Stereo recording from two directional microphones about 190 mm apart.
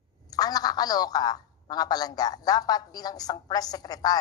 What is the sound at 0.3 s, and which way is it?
A woman's voice, 20° left (ahead or behind).